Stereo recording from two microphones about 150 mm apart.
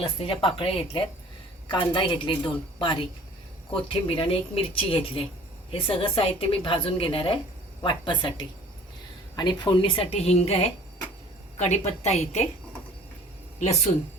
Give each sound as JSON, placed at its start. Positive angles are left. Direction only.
{"t": 0.0, "sound": "a woman's voice", "side_deg": 35}
{"t": 13.6, "sound": "a woman's voice", "side_deg": 50}